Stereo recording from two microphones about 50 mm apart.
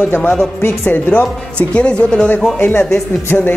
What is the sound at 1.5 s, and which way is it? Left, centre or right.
A man's voice, left.